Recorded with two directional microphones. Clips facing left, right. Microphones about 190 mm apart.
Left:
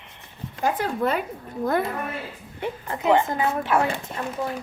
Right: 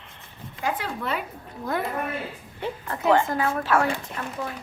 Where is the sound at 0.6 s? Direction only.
45° left (ahead or behind).